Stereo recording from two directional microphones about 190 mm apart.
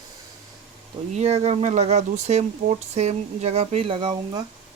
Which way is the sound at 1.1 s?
35° right (ahead or behind).